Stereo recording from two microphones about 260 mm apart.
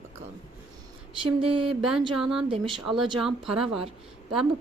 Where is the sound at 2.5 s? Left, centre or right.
Centre.